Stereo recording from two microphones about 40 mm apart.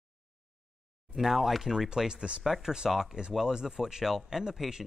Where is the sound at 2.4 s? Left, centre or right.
Centre.